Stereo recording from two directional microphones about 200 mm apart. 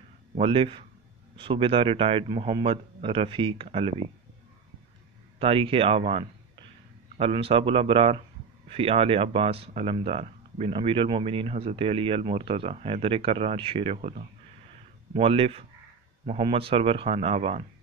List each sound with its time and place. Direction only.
0.4 s speech: 25° right (ahead or behind)
5.4 s speech: 30° right (ahead or behind)